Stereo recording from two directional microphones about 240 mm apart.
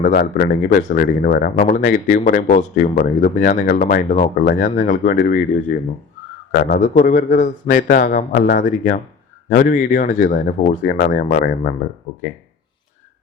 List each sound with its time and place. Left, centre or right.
0.0 s speech: left